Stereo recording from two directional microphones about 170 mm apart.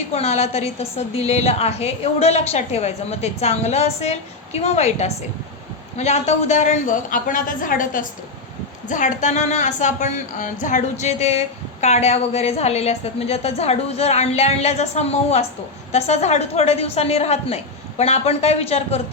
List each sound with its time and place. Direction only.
0.1 s a woman's voice: 40° left (ahead or behind)